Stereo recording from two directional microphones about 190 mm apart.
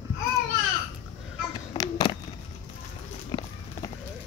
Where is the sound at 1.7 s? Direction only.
20° left (ahead or behind).